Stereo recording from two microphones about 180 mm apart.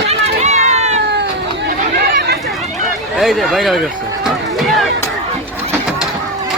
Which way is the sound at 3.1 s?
Centre (ahead or behind).